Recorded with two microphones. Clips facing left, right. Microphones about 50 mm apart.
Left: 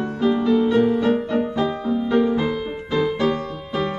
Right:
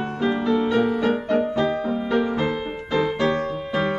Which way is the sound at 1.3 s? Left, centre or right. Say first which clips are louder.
Right 1 dB; centre.